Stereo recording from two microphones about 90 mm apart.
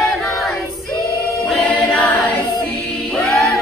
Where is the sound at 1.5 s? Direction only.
10° left (ahead or behind).